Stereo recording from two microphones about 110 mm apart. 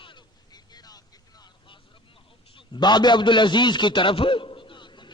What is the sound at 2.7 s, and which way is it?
A man's voice, 40° left (ahead or behind).